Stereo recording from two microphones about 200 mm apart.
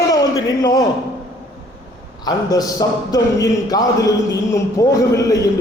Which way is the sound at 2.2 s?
20° left (ahead or behind).